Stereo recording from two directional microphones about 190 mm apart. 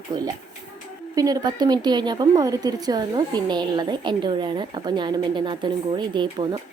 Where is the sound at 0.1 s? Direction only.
20° right (ahead or behind).